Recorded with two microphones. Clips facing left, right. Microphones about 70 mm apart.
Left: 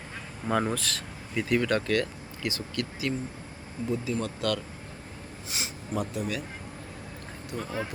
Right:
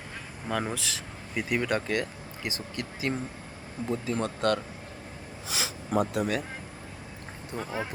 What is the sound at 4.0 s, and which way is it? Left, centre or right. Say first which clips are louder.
Speech: right 2 dB; right.